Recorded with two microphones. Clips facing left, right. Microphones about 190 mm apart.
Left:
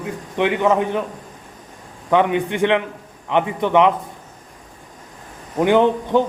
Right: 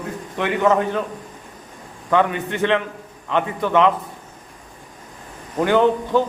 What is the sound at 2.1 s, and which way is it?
A man's voice, 15° left (ahead or behind).